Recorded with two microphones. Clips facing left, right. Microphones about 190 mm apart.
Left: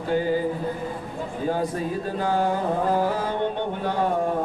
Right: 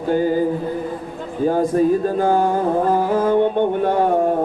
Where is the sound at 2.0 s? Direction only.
45° right (ahead or behind).